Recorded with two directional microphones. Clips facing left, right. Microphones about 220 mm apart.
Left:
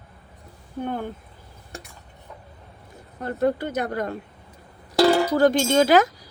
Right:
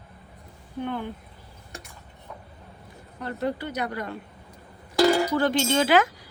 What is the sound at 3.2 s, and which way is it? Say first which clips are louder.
A woman's voice: left 6 dB; 50° left (ahead or behind).